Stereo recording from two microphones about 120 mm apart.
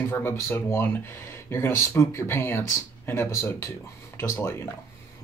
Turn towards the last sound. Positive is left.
turn(degrees=20)  # may be behind; listen again after turning